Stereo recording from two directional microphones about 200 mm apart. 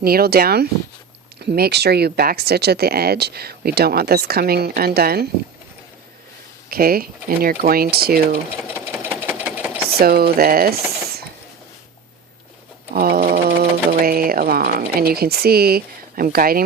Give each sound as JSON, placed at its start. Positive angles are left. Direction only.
{"t": 0.0, "sound": "speech", "side_deg": -50}
{"t": 6.7, "sound": "speech", "side_deg": -50}
{"t": 8.7, "sound": "engine", "side_deg": -10}
{"t": 9.4, "sound": "sewing machine", "side_deg": -5}
{"t": 10.0, "sound": "speech", "side_deg": -50}
{"t": 12.9, "sound": "speech", "side_deg": -50}